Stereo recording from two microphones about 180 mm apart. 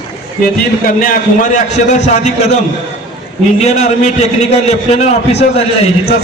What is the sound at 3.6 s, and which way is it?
A man's voice, 40° left (ahead or behind).